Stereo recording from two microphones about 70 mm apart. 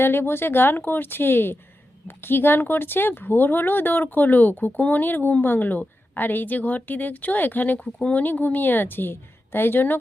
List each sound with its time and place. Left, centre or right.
0.0 s speech: left